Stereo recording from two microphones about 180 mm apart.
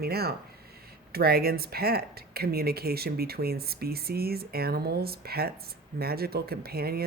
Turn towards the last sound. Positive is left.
turn(degrees=-60)  # may be behind; listen again after turning